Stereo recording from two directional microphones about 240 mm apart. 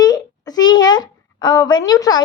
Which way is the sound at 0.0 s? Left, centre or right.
Centre.